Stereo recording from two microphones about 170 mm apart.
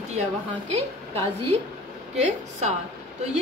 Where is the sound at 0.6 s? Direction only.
35° right (ahead or behind).